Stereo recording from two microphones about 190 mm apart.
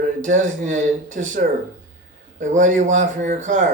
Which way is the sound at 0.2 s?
40° right (ahead or behind).